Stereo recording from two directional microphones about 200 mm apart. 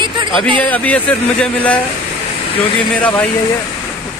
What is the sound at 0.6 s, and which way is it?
Speech, 5° left (ahead or behind).